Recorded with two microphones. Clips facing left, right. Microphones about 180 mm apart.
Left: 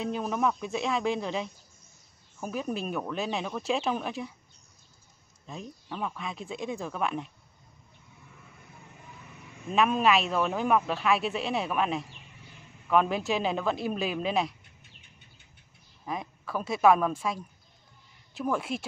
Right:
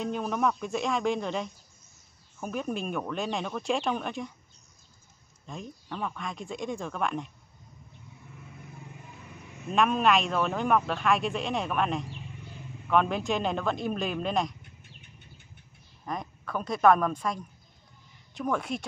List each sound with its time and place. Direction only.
0.0 s a man's voice: centre (ahead or behind)
5.5 s a man's voice: 5° left (ahead or behind)
9.7 s a man's voice: centre (ahead or behind)
16.1 s a man's voice: 5° left (ahead or behind)